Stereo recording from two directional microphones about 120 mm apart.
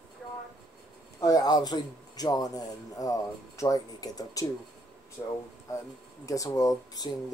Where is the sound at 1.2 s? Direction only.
30° left (ahead or behind).